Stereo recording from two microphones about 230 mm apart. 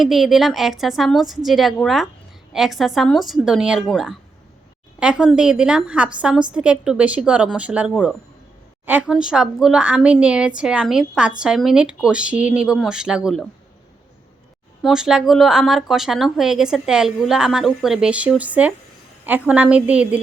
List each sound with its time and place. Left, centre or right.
0.0 s speech: centre
14.8 s speech: centre